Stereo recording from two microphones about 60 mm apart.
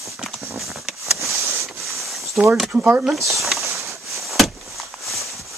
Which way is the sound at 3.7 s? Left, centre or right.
Right.